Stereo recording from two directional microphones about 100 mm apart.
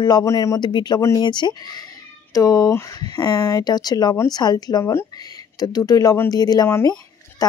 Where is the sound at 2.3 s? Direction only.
35° left (ahead or behind).